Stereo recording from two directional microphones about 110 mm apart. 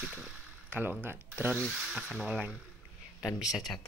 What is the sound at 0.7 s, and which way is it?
Speech, 15° right (ahead or behind).